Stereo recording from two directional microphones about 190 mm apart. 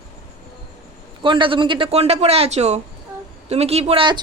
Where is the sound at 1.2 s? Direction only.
25° right (ahead or behind).